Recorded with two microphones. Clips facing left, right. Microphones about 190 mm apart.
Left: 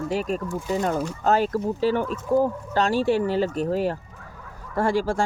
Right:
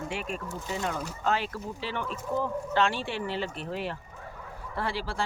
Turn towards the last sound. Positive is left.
turn(degrees=45)  # may be behind; listen again after turning